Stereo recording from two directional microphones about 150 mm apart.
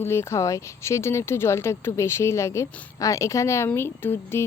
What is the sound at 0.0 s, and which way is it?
Speech, 15° left (ahead or behind).